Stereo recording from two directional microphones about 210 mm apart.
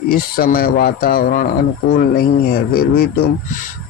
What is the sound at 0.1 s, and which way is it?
Speech, 45° left (ahead or behind).